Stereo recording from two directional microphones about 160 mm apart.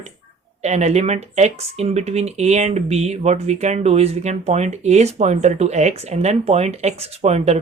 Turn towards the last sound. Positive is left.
turn(degrees=-45)  # may be behind; listen again after turning